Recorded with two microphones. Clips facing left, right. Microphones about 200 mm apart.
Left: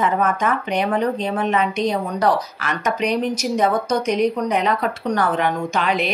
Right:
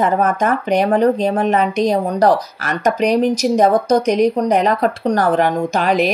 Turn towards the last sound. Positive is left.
turn(degrees=-40)  # may be behind; listen again after turning